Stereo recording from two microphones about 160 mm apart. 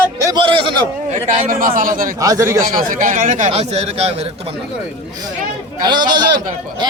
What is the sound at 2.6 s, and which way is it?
Speech, 55° right (ahead or behind).